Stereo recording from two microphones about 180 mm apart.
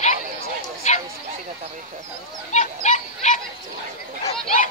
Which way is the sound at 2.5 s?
45° left (ahead or behind).